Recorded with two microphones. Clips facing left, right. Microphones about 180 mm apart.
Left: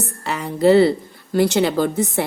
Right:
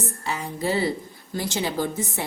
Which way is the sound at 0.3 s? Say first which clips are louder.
Left 12 dB; 70° left (ahead or behind).